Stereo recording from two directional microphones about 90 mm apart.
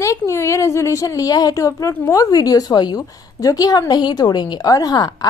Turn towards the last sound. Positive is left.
turn(degrees=45)  # may be behind; listen again after turning